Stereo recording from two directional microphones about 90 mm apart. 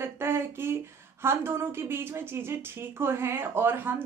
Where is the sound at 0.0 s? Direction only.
25° right (ahead or behind).